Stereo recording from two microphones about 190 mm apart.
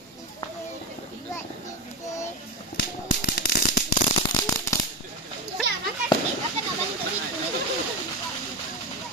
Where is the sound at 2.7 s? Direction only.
55° left (ahead or behind).